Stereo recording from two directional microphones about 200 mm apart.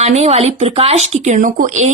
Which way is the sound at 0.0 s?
30° right (ahead or behind).